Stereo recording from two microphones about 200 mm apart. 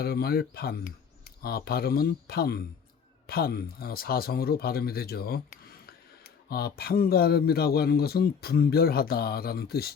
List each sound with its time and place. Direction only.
0.0 s speech: 50° left (ahead or behind)